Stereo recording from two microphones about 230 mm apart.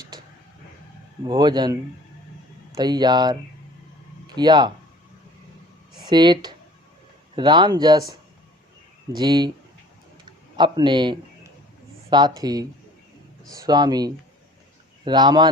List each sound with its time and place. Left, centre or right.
1.2 s speech: centre
4.4 s speech: centre
6.0 s speech: centre
9.1 s a man's voice: centre